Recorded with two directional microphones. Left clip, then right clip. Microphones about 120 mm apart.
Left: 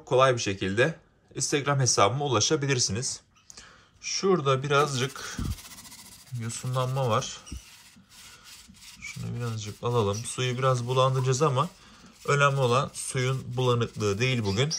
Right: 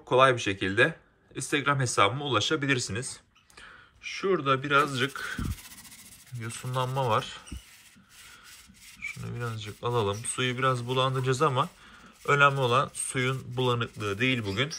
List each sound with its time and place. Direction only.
0.0 s speech: 15° left (ahead or behind)
4.0 s speech: 45° left (ahead or behind)
6.4 s speech: 25° left (ahead or behind)
9.0 s speech: 15° left (ahead or behind)
9.8 s speech: 25° left (ahead or behind); by 14.8 s 45° left (ahead or behind)